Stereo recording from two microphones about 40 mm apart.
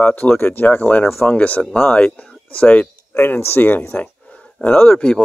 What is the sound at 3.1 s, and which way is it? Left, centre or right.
Speech, left.